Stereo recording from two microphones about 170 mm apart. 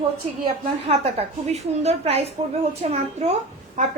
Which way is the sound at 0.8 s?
35° right (ahead or behind).